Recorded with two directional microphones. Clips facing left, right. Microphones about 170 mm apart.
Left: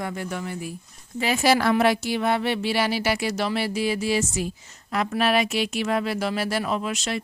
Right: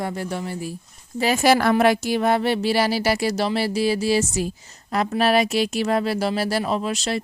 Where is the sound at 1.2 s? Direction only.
45° right (ahead or behind).